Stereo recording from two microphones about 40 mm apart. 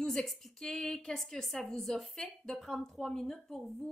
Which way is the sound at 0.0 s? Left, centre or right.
Centre.